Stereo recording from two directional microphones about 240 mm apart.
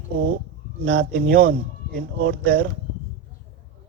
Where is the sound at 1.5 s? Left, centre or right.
Right.